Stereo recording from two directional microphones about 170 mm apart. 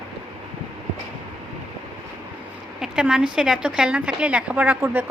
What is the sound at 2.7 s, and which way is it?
A woman's voice, 5° right (ahead or behind).